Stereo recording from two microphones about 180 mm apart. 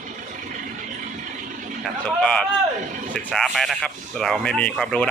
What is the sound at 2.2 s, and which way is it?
Speech, 5° left (ahead or behind).